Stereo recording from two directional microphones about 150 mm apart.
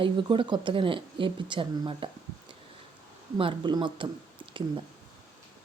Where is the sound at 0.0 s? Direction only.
35° right (ahead or behind).